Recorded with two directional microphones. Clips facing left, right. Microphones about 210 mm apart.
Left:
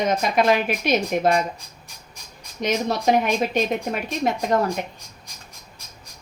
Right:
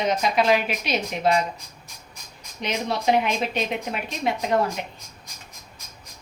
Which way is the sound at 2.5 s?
45° left (ahead or behind).